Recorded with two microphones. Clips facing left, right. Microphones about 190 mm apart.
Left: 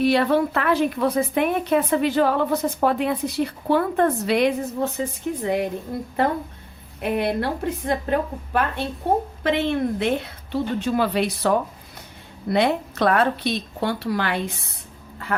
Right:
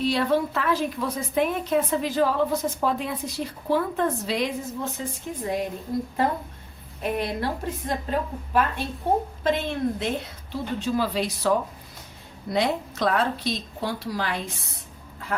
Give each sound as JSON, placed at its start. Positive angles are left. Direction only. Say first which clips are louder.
{"t": 0.0, "sound": "a woman's voice", "louder": "left 4 dB", "side_deg": 60}
{"t": 7.0, "sound": "a woman's voice", "louder": "left 4 dB", "side_deg": 60}